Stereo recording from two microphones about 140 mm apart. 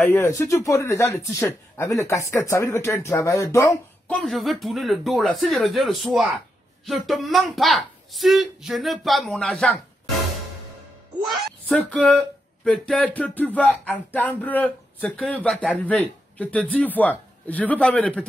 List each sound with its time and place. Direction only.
0.0 s speech: 20° left (ahead or behind)
4.1 s speech: 5° left (ahead or behind)
11.6 s speech: 10° left (ahead or behind)